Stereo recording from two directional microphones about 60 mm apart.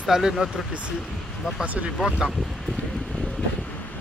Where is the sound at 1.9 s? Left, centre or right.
Centre.